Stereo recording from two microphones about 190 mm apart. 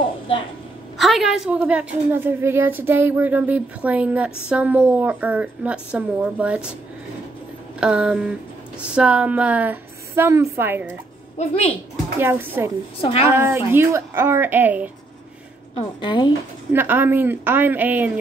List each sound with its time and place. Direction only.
0.9 s a woman's voice: centre (ahead or behind)
7.8 s a sound: 5° right (ahead or behind)
8.9 s a woman's voice: 5° right (ahead or behind)
11.3 s a woman's voice: 35° left (ahead or behind)
12.2 s a woman's voice: 10° right (ahead or behind)
16.0 s speech: 25° left (ahead or behind)
16.7 s a woman's voice: 10° right (ahead or behind)